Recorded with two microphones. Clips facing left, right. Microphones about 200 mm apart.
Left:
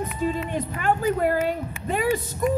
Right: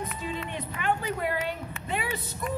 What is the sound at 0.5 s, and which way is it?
Speech, 45° left (ahead or behind).